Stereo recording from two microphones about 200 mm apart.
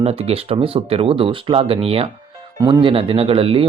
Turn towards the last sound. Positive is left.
turn(degrees=-30)  # may be behind; listen again after turning